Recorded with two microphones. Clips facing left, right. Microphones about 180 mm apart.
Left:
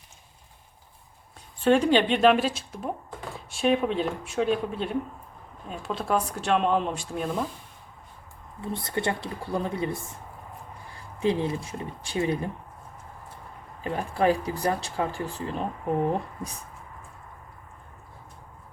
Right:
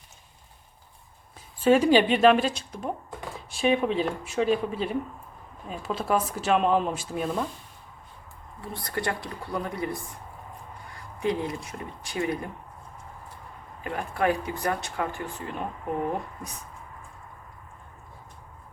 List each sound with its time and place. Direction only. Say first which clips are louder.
1.5 s speech: right 1 dB; 5° right (ahead or behind)
8.6 s speech: left 2 dB; 25° left (ahead or behind)
13.8 s speech: left 2 dB; 30° left (ahead or behind)